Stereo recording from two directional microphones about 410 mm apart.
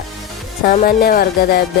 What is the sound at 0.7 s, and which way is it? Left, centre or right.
Speech, left.